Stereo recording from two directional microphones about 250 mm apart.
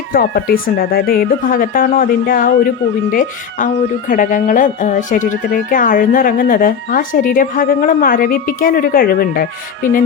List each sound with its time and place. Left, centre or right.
0.1 s speech: left